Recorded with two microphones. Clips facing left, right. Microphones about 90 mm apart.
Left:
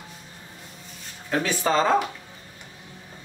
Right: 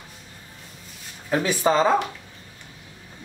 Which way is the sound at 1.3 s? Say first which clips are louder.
Right 3 dB; 15° right (ahead or behind).